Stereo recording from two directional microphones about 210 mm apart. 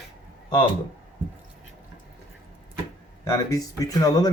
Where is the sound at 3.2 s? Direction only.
15° left (ahead or behind).